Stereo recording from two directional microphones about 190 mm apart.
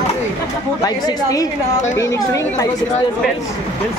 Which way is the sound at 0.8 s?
20° left (ahead or behind).